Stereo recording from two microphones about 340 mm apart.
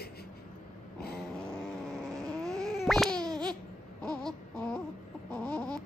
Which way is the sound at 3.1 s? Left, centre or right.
Centre.